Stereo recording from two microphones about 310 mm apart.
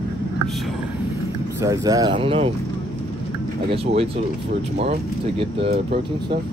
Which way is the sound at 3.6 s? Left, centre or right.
Centre.